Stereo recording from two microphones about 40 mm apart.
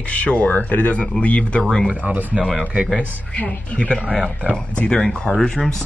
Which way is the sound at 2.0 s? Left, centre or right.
Right.